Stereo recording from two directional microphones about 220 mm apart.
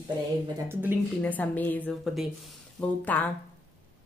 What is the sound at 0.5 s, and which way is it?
Speech, 10° right (ahead or behind).